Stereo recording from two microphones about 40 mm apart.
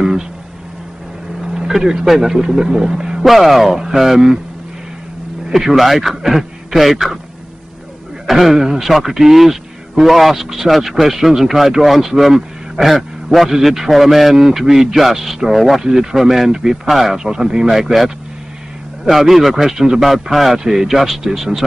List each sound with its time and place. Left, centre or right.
1.4 s vehicle: centre
1.7 s a man's voice: centre
3.2 s a man's voice: centre
5.5 s a man's voice: centre
8.3 s a man's voice: centre
12.9 s a man's voice: centre
17.2 s a man's voice: centre
17.6 s a man's voice: centre